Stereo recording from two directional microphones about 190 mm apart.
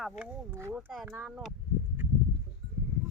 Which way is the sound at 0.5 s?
10° right (ahead or behind).